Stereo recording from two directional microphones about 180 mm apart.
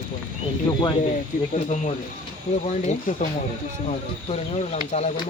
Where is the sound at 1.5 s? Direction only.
40° left (ahead or behind).